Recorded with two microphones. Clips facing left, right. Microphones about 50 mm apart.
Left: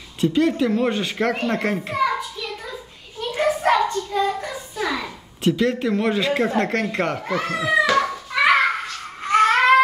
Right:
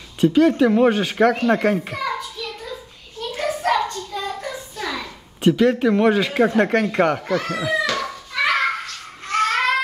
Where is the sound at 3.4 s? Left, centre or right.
Centre.